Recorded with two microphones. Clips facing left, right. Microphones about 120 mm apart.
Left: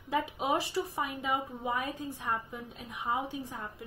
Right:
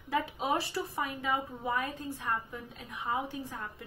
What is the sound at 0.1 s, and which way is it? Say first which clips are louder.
A woman's voice: left 1 dB; 15° left (ahead or behind).